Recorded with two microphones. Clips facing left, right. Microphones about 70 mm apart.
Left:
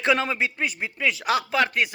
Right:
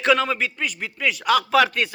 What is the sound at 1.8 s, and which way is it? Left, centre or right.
Speech, centre.